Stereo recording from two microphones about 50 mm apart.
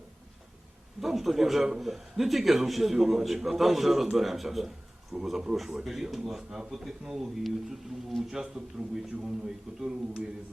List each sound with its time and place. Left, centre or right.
1.0 s a man's voice: centre